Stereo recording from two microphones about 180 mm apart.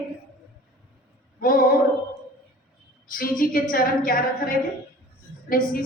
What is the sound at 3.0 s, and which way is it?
A woman's voice, 50° left (ahead or behind).